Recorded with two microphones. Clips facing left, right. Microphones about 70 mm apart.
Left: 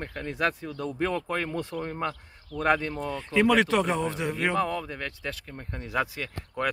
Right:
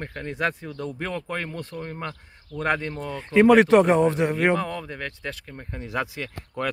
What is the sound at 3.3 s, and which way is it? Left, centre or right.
Speech, right.